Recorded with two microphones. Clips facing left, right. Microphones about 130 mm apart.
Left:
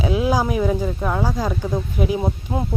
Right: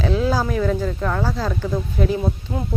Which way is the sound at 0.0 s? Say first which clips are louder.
Left 1 dB; 10° left (ahead or behind).